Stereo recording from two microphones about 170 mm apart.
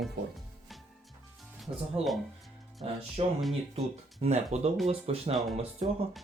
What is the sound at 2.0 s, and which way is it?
Speech, 35° right (ahead or behind).